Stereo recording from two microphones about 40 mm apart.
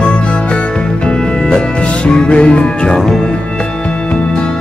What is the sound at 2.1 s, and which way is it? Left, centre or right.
Music, left.